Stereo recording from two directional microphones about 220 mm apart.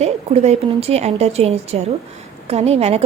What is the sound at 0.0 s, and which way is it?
A woman's voice, 30° right (ahead or behind).